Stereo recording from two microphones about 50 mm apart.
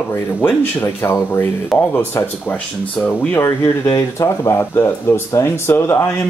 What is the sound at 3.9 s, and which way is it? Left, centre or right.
Speech, left.